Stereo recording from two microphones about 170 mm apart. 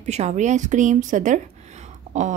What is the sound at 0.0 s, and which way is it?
A woman's voice, 40° right (ahead or behind).